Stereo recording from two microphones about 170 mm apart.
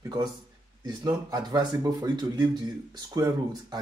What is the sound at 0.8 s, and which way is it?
Speech, 20° right (ahead or behind).